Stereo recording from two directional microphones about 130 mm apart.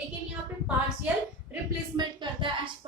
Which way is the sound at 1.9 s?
40° right (ahead or behind).